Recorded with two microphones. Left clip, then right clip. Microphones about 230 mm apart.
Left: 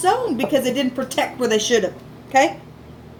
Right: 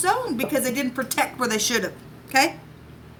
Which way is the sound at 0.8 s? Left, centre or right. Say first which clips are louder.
Left 3 dB; right.